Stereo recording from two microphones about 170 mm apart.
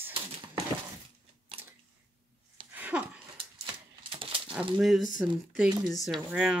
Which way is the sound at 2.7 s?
10° right (ahead or behind).